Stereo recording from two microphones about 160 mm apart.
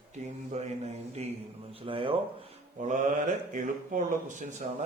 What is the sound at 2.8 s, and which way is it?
Speech, 50° right (ahead or behind).